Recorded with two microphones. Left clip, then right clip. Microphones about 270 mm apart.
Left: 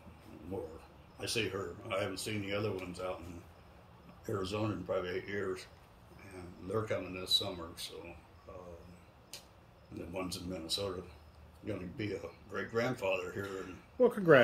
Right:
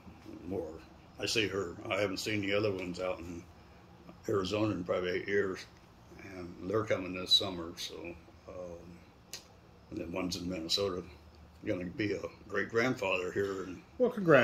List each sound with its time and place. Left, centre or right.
1.1 s speech: centre
4.4 s speech: centre
8.5 s a sound: centre
9.9 s speech: centre
14.0 s speech: centre